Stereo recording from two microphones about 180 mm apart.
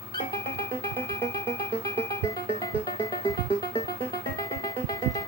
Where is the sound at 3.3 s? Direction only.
30° left (ahead or behind).